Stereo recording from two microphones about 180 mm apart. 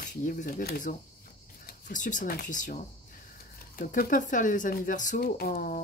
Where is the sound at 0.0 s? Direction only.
45° left (ahead or behind).